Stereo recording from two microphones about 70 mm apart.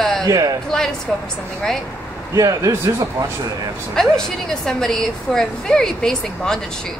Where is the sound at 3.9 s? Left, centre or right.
Centre.